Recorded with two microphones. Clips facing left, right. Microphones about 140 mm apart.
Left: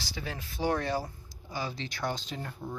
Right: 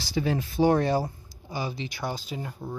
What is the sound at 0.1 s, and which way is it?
Speech, 20° right (ahead or behind).